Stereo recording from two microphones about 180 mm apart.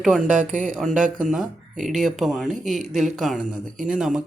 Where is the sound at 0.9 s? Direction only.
45° right (ahead or behind).